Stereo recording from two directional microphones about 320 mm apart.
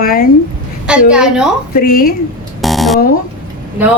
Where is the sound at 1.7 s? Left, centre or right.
Left.